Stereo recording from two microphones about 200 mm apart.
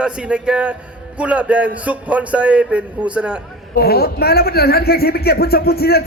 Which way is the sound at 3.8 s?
50° left (ahead or behind).